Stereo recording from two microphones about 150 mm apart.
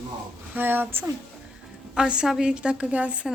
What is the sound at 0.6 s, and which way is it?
Speech, 15° right (ahead or behind).